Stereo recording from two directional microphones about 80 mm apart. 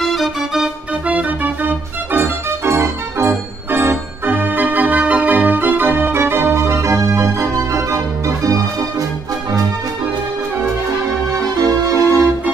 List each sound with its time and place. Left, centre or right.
0.0 s organ: centre
1.0 s organ: centre; by 8.0 s right
11.6 s organ: right